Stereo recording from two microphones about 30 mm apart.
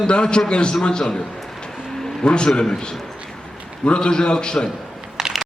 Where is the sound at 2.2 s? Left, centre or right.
Left.